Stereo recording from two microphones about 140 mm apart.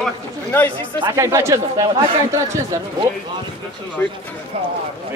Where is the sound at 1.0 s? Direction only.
25° right (ahead or behind).